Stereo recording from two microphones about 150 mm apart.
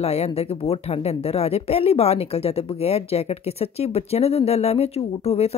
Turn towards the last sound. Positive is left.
turn(degrees=40)  # may be behind; listen again after turning